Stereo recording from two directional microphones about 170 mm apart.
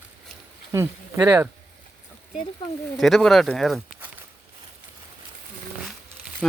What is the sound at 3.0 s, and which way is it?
Speech, centre (ahead or behind).